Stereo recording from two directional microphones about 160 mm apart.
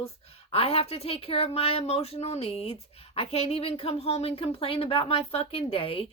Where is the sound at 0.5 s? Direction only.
40° left (ahead or behind).